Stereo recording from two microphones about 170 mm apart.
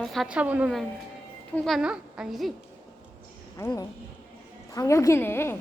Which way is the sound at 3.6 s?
15° left (ahead or behind).